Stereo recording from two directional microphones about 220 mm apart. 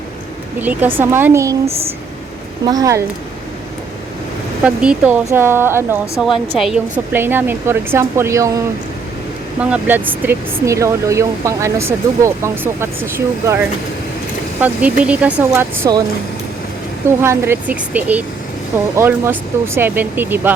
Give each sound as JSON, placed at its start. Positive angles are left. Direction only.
{"t": 0.6, "sound": "speech", "side_deg": -10}
{"t": 4.6, "sound": "a woman's voice", "side_deg": -5}
{"t": 14.6, "sound": "speech", "side_deg": -5}
{"t": 17.1, "sound": "speech", "side_deg": -10}